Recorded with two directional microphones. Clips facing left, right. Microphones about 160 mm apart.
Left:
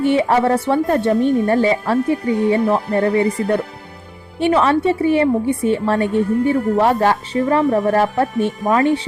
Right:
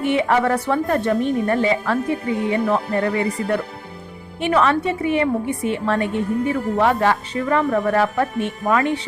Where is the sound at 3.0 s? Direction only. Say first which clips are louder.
Left 5 dB; 30° left (ahead or behind).